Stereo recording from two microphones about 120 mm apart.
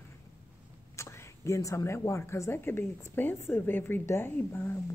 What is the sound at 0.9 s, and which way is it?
A woman's voice, 25° left (ahead or behind).